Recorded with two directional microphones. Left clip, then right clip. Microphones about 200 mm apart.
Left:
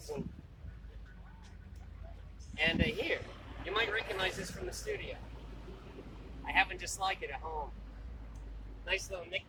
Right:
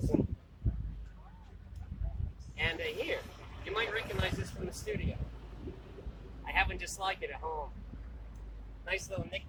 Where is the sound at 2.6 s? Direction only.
15° left (ahead or behind).